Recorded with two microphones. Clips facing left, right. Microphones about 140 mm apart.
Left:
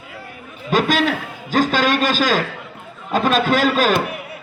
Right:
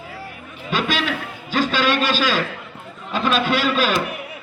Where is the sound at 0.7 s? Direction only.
45° left (ahead or behind).